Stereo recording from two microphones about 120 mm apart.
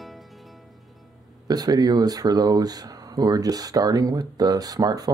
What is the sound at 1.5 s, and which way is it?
Speech, 35° right (ahead or behind).